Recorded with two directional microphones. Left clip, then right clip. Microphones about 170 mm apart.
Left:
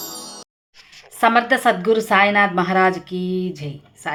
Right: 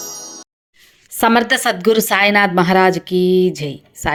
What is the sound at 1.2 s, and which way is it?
A woman's voice, 30° right (ahead or behind).